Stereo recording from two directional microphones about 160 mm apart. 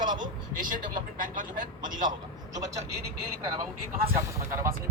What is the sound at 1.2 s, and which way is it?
Speech, 55° right (ahead or behind).